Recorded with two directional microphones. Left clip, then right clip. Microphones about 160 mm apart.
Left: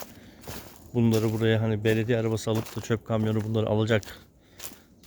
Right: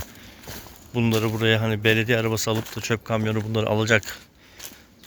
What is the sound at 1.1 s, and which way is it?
Speech, centre (ahead or behind).